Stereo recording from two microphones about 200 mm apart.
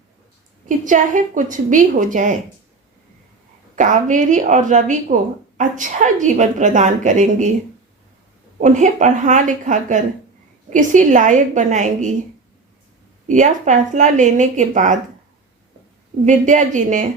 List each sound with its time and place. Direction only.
0.9 s a woman's voice: 40° right (ahead or behind)
3.8 s a woman's voice: 40° right (ahead or behind)
8.6 s a woman's voice: 35° right (ahead or behind)
13.2 s a woman's voice: 40° right (ahead or behind)
16.2 s a woman's voice: 40° right (ahead or behind)